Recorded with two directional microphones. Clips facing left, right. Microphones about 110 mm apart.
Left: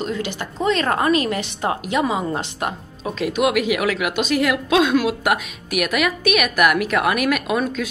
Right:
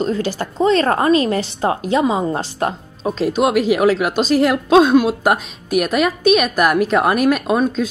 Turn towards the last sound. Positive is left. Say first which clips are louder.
# right 4 dB
turn(degrees=-30)  # may be behind; listen again after turning